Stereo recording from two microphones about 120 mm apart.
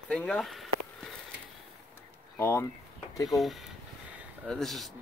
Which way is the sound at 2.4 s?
20° left (ahead or behind).